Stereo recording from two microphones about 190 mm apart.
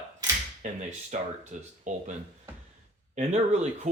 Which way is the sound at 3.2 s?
35° right (ahead or behind).